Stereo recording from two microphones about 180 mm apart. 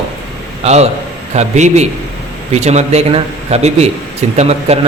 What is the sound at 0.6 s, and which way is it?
A man's voice, 35° right (ahead or behind).